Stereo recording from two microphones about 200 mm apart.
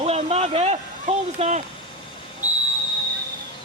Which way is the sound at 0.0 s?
30° right (ahead or behind).